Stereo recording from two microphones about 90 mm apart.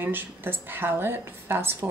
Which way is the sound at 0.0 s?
20° right (ahead or behind).